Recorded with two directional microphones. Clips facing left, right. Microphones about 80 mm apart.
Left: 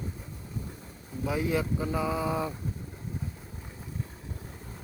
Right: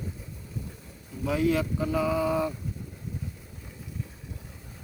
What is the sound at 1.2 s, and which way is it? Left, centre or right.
Speech, left.